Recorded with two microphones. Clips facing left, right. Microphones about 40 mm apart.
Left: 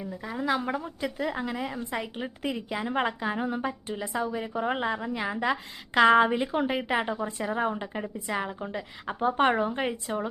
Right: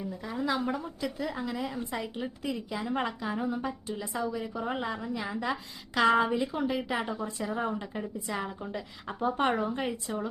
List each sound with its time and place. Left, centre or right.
0.0 s a woman's voice: centre